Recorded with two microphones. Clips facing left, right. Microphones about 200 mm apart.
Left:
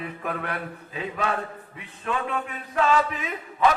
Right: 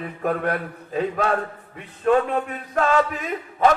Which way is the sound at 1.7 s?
40° right (ahead or behind).